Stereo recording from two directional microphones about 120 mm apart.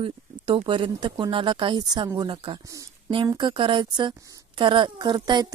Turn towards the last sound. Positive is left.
turn(degrees=-35)  # may be behind; listen again after turning